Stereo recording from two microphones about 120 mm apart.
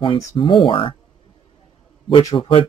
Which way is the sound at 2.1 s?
45° left (ahead or behind).